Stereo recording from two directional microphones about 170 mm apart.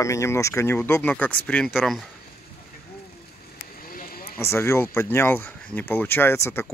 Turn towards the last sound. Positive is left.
turn(degrees=15)  # may be behind; listen again after turning